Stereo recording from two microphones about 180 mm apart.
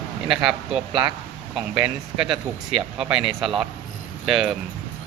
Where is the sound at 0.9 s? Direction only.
25° right (ahead or behind).